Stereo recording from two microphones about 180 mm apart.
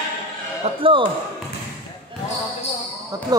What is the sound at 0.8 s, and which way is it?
Speech, 30° right (ahead or behind).